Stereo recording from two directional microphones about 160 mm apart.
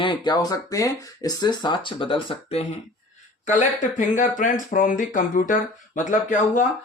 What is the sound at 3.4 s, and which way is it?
Speech, 50° left (ahead or behind).